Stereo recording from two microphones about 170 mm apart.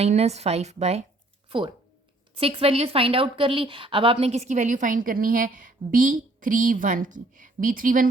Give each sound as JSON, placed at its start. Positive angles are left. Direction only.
{"t": 0.0, "sound": "a woman's voice", "side_deg": -40}